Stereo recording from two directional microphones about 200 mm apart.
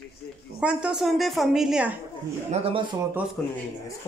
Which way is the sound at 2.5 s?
30° right (ahead or behind).